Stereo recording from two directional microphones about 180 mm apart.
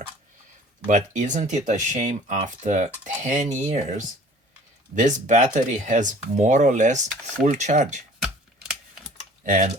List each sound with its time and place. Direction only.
0.9 s speech: 45° right (ahead or behind)
8.2 s typing: centre (ahead or behind)
9.4 s speech: 45° right (ahead or behind)